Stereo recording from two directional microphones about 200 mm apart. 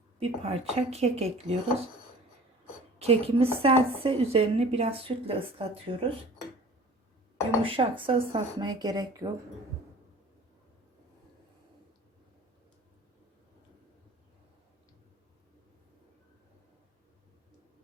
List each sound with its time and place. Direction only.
0.2 s speech: 30° right (ahead or behind)
3.0 s a woman's voice: 30° right (ahead or behind)
7.6 s a woman's voice: 25° right (ahead or behind)